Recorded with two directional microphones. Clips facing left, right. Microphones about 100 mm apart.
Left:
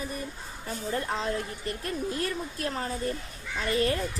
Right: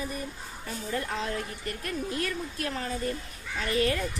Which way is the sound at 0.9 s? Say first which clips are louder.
Left 2 dB; 30° left (ahead or behind).